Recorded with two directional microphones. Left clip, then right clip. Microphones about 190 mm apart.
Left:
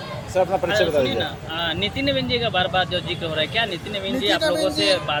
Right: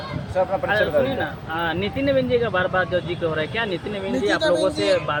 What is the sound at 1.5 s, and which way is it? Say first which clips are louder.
Speech: even; 40° right (ahead or behind).